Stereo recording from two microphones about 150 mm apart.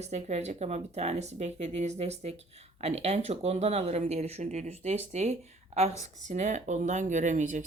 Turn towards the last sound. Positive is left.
turn(degrees=-55)  # may be behind; listen again after turning